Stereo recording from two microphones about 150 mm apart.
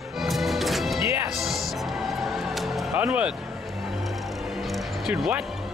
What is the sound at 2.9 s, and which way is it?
Speech, 10° right (ahead or behind).